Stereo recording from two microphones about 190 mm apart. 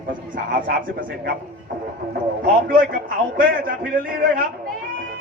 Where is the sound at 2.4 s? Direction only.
50° right (ahead or behind).